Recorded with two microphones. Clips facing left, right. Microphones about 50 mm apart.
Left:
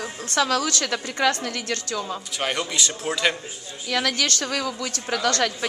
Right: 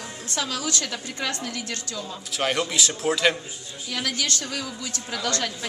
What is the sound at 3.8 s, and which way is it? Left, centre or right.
A woman's voice, left.